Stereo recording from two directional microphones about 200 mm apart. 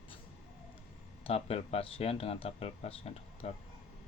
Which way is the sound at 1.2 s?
30° left (ahead or behind).